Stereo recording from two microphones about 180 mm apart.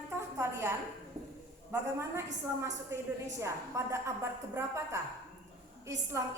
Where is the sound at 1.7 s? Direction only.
15° right (ahead or behind).